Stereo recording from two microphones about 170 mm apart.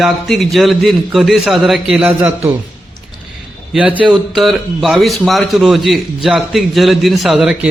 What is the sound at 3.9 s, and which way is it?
A man's voice, centre (ahead or behind).